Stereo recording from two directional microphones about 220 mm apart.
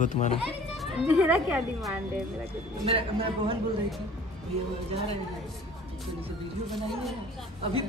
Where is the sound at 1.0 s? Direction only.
5° right (ahead or behind).